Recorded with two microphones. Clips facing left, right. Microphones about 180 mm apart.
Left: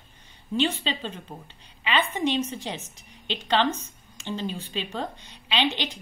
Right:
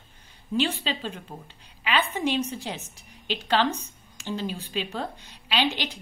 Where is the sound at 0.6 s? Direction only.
5° right (ahead or behind).